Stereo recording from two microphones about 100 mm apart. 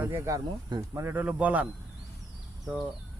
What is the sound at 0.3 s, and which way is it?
Speech, 40° right (ahead or behind).